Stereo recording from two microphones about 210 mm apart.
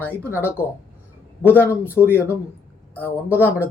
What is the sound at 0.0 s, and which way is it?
A woman's voice, 10° left (ahead or behind).